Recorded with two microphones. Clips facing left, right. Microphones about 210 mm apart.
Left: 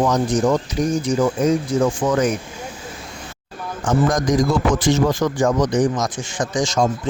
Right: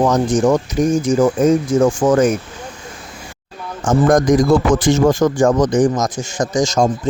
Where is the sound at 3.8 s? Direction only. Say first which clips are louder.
Right 5 dB; 50° right (ahead or behind).